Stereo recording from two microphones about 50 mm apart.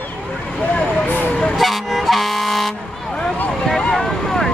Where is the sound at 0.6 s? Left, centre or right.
Left.